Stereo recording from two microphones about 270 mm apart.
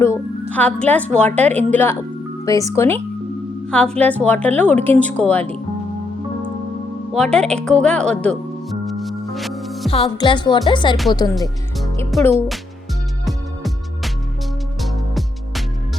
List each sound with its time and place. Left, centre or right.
0.0 s a woman's voice: centre
2.5 s music: centre
3.7 s a woman's voice: centre
7.1 s music: centre
9.9 s music: centre
11.3 s music: centre